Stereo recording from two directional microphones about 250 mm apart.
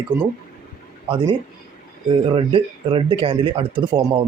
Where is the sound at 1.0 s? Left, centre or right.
Centre.